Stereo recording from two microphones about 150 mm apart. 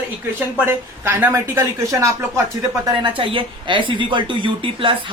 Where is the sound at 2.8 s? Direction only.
35° right (ahead or behind).